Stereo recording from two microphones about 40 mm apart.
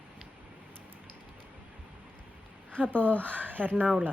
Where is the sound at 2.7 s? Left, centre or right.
Left.